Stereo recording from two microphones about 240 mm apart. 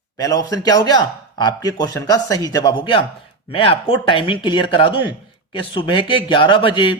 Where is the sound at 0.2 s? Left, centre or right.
Centre.